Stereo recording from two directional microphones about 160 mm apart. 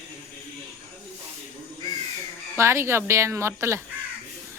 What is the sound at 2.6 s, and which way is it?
Speech, 15° right (ahead or behind).